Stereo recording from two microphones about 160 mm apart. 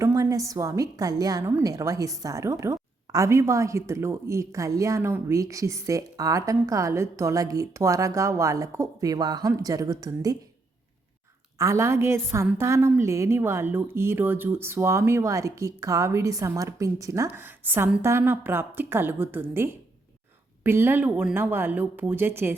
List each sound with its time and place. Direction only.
0.0 s a woman's voice: 20° right (ahead or behind)
11.5 s speech: 15° right (ahead or behind)